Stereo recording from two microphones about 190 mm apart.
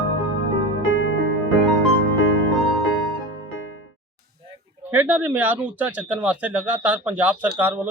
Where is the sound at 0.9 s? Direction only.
90° left.